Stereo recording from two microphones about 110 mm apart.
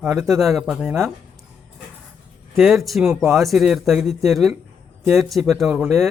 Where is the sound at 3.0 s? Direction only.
25° right (ahead or behind).